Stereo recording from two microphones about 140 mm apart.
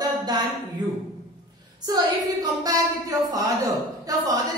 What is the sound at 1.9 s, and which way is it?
A woman's voice, 25° right (ahead or behind).